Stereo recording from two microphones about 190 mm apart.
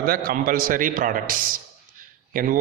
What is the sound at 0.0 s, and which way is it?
A man's voice, 50° right (ahead or behind).